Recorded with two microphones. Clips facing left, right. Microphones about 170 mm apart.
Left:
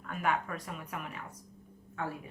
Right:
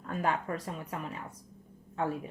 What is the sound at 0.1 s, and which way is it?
Speech, 30° right (ahead or behind).